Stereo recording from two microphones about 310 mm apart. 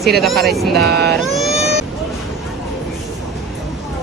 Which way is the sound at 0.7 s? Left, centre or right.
Right.